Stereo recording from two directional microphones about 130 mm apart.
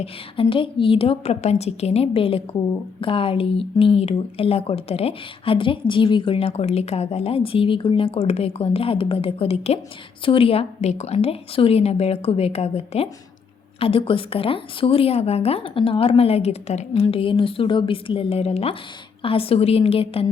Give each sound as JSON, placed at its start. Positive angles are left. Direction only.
{"t": 0.5, "sound": "speech", "side_deg": 40}